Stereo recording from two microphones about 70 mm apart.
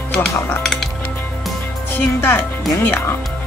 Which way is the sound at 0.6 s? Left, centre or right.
Centre.